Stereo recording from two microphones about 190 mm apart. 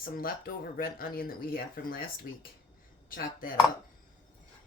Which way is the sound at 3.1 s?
45° left (ahead or behind).